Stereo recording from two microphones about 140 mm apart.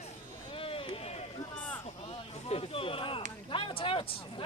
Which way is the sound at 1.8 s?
45° left (ahead or behind).